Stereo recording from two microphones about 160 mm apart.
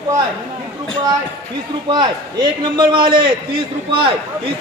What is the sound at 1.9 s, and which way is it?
A man's voice, 30° right (ahead or behind).